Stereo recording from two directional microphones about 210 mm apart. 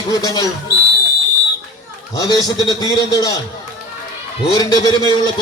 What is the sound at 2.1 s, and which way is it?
A man's voice, 20° left (ahead or behind).